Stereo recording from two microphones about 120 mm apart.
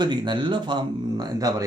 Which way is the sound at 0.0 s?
40° right (ahead or behind).